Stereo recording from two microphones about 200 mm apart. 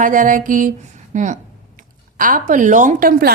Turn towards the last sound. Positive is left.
turn(degrees=-45)  # may be behind; listen again after turning